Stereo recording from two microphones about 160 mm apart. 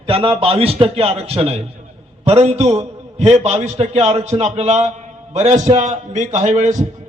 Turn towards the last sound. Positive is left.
turn(degrees=-50)  # may be behind; listen again after turning